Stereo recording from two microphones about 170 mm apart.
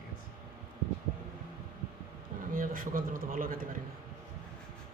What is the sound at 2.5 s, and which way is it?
A man's voice, 55° right (ahead or behind).